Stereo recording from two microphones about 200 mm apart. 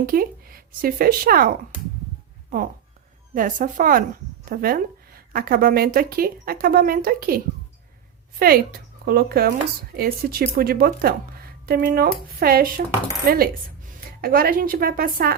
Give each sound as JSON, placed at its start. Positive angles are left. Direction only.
{"t": 0.0, "sound": "a woman's voice", "side_deg": -45}
{"t": 3.3, "sound": "speech", "side_deg": -40}